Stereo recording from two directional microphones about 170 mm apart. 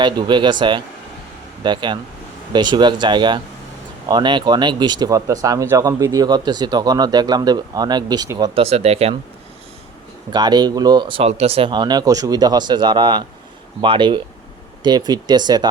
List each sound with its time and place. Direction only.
0.0 s speech: 25° right (ahead or behind)
8.6 s speech: 35° right (ahead or behind)
10.3 s speech: 25° right (ahead or behind)